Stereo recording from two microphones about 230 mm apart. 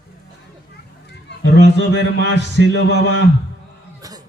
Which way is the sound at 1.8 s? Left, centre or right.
Left.